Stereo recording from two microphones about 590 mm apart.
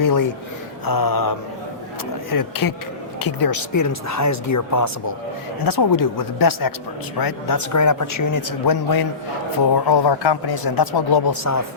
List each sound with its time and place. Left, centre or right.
0.0 s speech: left